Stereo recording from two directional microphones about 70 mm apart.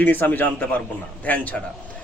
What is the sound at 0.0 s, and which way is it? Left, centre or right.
A man's voice, left.